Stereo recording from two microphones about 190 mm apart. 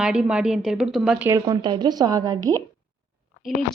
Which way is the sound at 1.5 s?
25° right (ahead or behind).